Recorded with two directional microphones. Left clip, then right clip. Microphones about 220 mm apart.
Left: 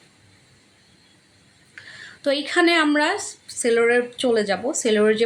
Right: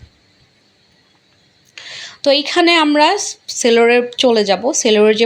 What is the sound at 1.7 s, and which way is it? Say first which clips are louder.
Speech: right 9 dB; 25° right (ahead or behind).